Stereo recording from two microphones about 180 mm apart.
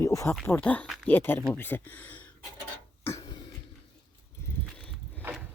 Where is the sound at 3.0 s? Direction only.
20° left (ahead or behind).